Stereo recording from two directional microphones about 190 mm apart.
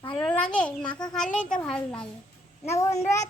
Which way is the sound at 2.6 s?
15° left (ahead or behind).